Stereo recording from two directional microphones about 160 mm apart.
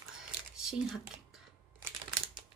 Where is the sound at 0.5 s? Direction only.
5° right (ahead or behind).